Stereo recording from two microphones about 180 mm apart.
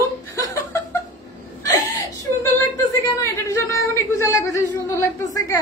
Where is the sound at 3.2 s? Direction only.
15° left (ahead or behind).